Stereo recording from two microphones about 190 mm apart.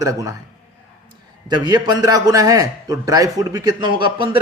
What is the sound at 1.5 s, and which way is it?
A man's voice, 20° right (ahead or behind).